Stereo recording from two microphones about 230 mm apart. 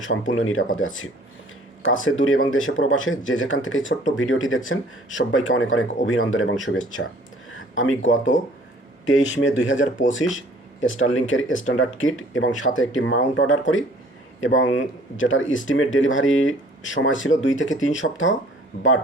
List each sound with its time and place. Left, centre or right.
0.0 s speech: left